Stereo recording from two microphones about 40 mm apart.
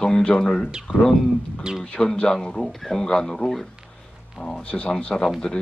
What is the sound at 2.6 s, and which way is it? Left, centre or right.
Speech, centre.